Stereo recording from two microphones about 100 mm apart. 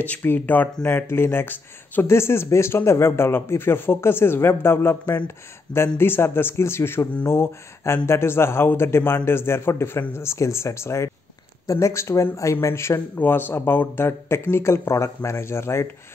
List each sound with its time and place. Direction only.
0.0 s speech: 20° left (ahead or behind)